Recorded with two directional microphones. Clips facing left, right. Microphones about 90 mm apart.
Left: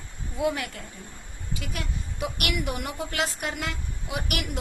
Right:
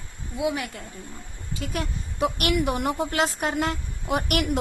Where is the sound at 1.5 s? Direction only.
35° right (ahead or behind).